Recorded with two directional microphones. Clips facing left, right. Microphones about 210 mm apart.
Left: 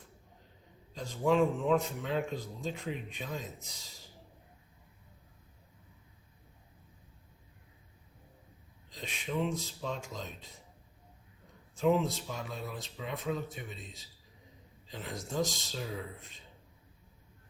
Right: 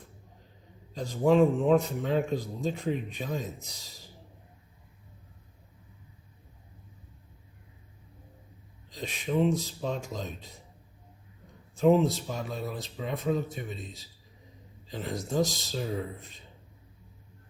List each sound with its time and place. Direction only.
0.9 s speech: 35° right (ahead or behind)
8.9 s speech: 40° right (ahead or behind)
11.7 s speech: 35° right (ahead or behind)